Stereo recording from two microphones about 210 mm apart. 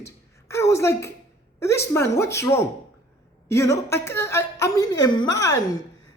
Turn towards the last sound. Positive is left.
turn(degrees=15)  # may be behind; listen again after turning